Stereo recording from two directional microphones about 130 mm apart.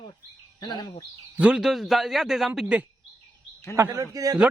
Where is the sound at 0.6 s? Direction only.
35° left (ahead or behind).